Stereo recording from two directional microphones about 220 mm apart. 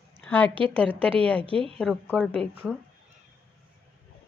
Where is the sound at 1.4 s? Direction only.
25° right (ahead or behind).